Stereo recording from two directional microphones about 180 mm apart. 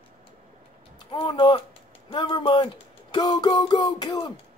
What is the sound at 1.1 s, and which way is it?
Speech, 25° left (ahead or behind).